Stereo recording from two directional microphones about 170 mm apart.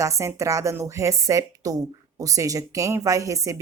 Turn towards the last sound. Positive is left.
turn(degrees=-20)  # may be behind; listen again after turning